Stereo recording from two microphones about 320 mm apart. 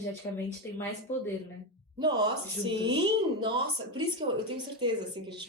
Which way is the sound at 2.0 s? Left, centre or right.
Centre.